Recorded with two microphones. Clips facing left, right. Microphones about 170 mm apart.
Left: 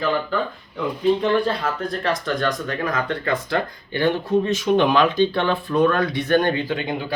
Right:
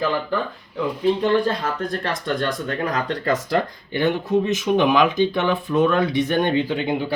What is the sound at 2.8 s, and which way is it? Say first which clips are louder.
Speech: right 2 dB; 35° right (ahead or behind).